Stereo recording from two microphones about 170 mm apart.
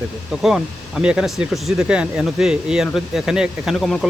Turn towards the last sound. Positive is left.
turn(degrees=0)  # may be behind; listen again after turning